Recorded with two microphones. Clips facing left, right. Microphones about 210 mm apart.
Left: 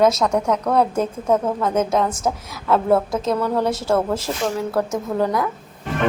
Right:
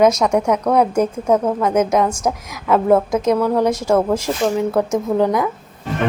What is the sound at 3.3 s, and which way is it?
A woman's voice, 10° right (ahead or behind).